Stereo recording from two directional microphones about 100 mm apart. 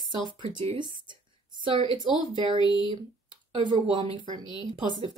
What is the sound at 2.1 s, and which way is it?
Speech, 45° left (ahead or behind).